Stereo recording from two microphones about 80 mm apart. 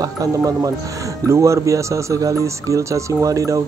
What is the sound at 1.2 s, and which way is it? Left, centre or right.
Music, right.